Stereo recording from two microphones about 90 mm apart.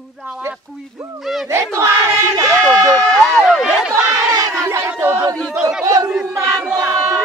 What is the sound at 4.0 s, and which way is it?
Crowd, centre (ahead or behind).